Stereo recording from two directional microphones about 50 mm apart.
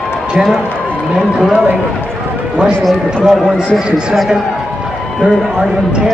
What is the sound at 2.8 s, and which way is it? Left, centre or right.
Speech, centre.